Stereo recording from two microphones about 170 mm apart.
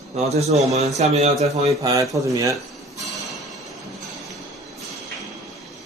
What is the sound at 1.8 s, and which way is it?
Speech, 20° right (ahead or behind).